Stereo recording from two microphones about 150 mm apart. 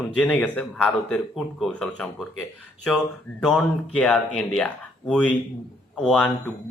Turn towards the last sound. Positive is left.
turn(degrees=5)  # may be behind; listen again after turning